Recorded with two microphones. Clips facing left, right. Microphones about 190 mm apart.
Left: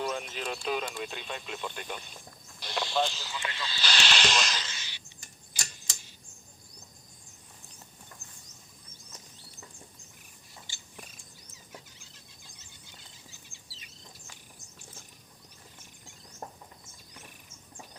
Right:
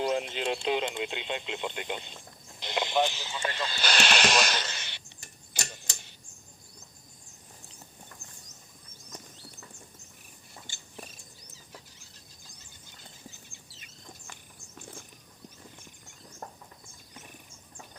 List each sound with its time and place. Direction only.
0.0 s speech: 30° right (ahead or behind)
2.6 s vehicle: 20° right (ahead or behind)
3.4 s snake: 50° right (ahead or behind)
5.5 s tick-tock: 65° right (ahead or behind)
13.5 s cricket: 55° right (ahead or behind)
16.4 s a sound: 20° left (ahead or behind)